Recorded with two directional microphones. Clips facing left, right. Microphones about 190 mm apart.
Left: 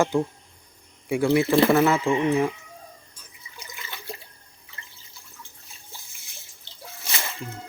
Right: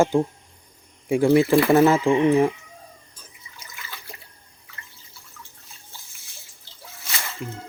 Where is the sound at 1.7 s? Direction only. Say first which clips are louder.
Right 3 dB; 30° right (ahead or behind).